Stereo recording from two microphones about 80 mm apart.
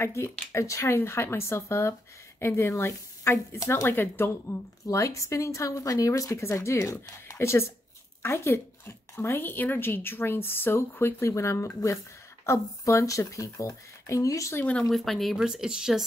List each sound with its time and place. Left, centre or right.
0.0 s speech: left
3.8 s speech: left
14.9 s speech: centre